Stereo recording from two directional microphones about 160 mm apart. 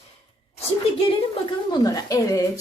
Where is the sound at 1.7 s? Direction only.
25° left (ahead or behind).